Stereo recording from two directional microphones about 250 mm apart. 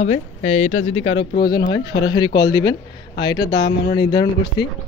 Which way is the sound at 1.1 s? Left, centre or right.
Centre.